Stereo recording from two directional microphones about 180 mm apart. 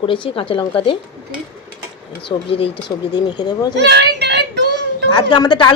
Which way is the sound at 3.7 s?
70° right (ahead or behind).